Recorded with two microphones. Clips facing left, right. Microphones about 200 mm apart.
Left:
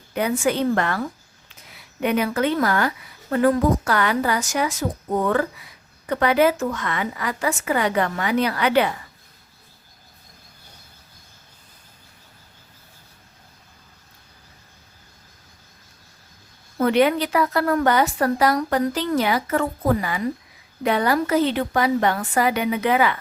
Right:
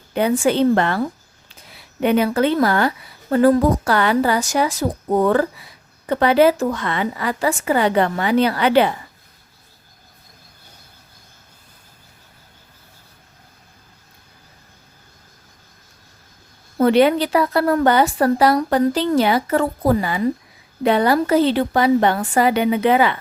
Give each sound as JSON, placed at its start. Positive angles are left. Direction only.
{"t": 0.1, "sound": "a woman's voice", "side_deg": -30}
{"t": 16.7, "sound": "a woman's voice", "side_deg": -30}